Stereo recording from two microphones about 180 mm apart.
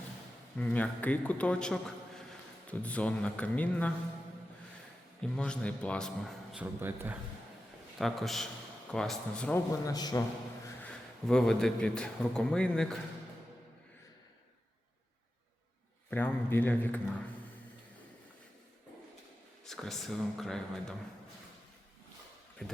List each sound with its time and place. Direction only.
0.6 s a man's voice: 10° left (ahead or behind)
5.2 s a man's voice: 5° left (ahead or behind); by 7.2 s 10° right (ahead or behind)
7.9 s a man's voice: centre (ahead or behind)
9.8 s a man's voice: 20° left (ahead or behind)
11.3 s a man's voice: 5° left (ahead or behind)
16.0 s a man's voice: 10° left (ahead or behind)
19.6 s a man's voice: centre (ahead or behind)
22.6 s a man's voice: 5° left (ahead or behind)